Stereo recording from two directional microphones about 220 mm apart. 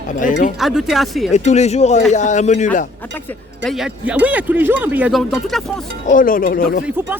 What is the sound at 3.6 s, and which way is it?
Speech, centre (ahead or behind).